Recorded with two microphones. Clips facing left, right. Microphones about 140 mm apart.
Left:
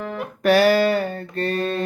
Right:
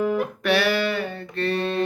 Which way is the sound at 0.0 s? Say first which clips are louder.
Right 6 dB; 10° right (ahead or behind).